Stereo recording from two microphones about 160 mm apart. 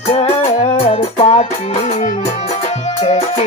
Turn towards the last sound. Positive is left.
turn(degrees=40)  # may be behind; listen again after turning